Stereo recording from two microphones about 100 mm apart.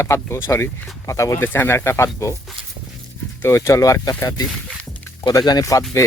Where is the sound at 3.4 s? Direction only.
30° left (ahead or behind).